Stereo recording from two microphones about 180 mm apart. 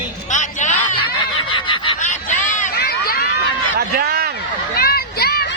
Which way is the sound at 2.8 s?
60° left (ahead or behind).